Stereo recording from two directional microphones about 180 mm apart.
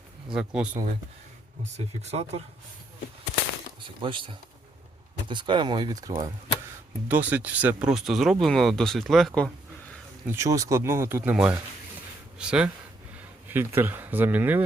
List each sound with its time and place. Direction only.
0.3 s speech: 5° right (ahead or behind)
2.0 s speech: 35° right (ahead or behind)
3.8 s speech: 30° right (ahead or behind)
7.1 s speech: 10° right (ahead or behind)
10.2 s speech: 15° right (ahead or behind)